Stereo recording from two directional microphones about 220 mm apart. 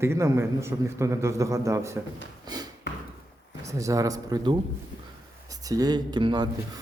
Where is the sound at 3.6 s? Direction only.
15° right (ahead or behind).